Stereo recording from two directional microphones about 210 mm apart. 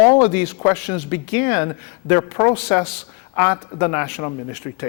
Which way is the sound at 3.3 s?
15° left (ahead or behind).